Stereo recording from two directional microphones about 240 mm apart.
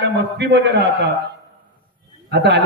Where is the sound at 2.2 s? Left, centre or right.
Right.